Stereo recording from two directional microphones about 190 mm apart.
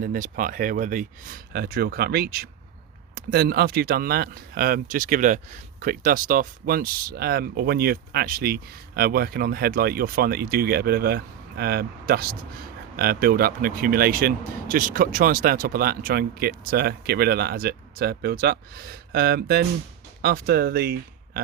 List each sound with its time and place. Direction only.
0.0 s speech: 45° right (ahead or behind)